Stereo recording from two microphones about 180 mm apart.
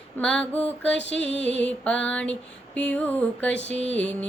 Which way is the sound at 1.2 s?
80° left.